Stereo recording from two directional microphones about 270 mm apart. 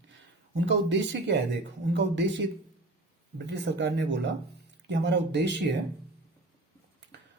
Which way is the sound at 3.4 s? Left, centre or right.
Right.